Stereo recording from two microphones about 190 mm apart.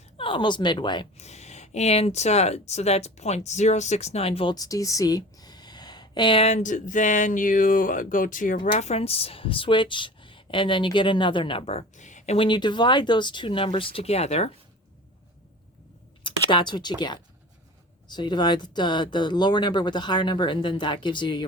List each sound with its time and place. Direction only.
0.2 s a woman's voice: 25° left (ahead or behind)
16.2 s speech: 25° left (ahead or behind)